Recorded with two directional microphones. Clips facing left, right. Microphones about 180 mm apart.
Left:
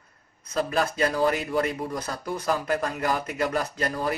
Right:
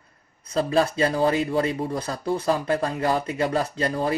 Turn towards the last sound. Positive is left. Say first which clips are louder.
# right 3 dB
turn(degrees=-30)  # may be behind; listen again after turning